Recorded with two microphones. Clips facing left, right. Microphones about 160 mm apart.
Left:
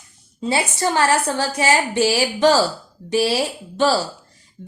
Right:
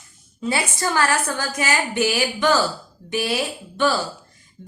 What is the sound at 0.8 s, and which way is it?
A woman's voice, 25° left (ahead or behind).